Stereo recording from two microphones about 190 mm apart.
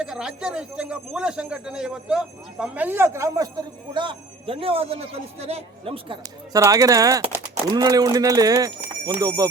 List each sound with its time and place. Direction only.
0.0 s speech: 5° right (ahead or behind); by 9.5 s 20° right (ahead or behind)